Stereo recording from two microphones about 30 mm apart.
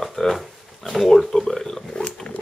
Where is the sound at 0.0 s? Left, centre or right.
Centre.